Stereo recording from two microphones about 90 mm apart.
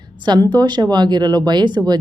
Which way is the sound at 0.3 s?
50° right (ahead or behind).